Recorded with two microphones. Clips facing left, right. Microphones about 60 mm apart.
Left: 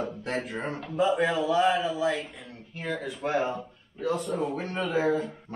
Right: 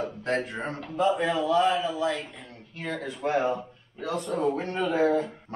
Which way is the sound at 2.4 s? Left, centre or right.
Left.